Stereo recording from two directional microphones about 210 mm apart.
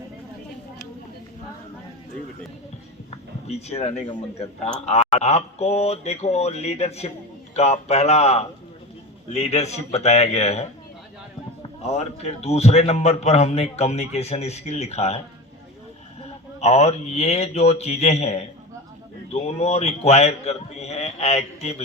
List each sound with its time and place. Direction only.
3.4 s a man's voice: 30° left (ahead or behind)
16.6 s a man's voice: 30° left (ahead or behind)